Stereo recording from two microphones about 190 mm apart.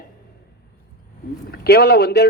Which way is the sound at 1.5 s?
55° left (ahead or behind).